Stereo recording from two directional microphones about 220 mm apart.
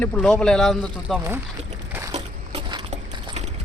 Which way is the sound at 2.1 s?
25° right (ahead or behind).